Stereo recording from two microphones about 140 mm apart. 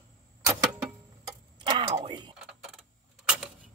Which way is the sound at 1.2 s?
30° right (ahead or behind).